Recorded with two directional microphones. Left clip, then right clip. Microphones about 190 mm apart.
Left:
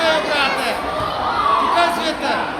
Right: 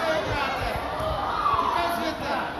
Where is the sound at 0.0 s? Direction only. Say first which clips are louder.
Left 9 dB; 50° left (ahead or behind).